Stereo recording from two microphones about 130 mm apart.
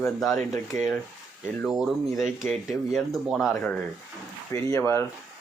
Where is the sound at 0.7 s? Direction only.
75° right (ahead or behind).